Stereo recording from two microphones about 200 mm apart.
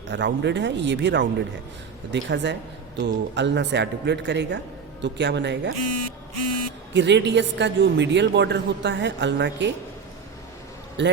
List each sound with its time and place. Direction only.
0.1 s a woman's voice: 60° right (ahead or behind)
6.9 s a woman's voice: 60° right (ahead or behind)
11.0 s a woman's voice: 60° right (ahead or behind)